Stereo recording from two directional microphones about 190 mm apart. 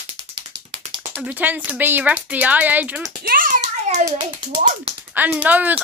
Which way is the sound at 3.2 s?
45° right (ahead or behind).